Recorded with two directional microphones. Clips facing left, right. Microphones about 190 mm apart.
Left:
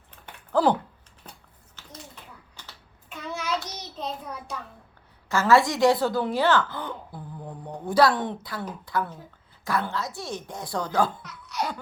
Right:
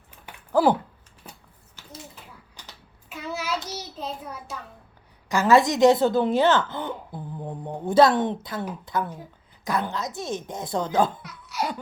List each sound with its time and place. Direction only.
0.3 s a sound: 10° right (ahead or behind)
2.6 s child singing: 10° right (ahead or behind)
5.3 s a woman's voice: 15° right (ahead or behind)
11.2 s laughter: 10° right (ahead or behind)